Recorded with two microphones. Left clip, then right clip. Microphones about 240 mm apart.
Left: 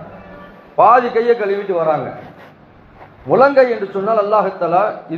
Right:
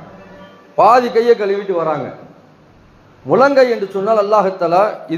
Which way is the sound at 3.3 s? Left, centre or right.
Right.